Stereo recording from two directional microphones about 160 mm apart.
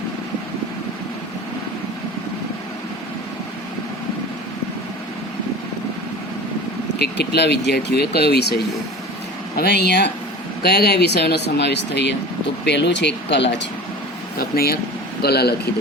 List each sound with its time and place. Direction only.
7.0 s speech: 90° left
14.3 s speech: 70° left (ahead or behind)
15.2 s speech: 90° left